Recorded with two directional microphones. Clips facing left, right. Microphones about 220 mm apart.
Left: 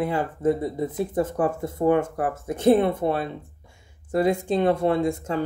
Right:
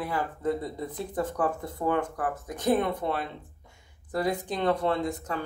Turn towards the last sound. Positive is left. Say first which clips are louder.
# left 6 dB
turn(degrees=25)  # may be behind; listen again after turning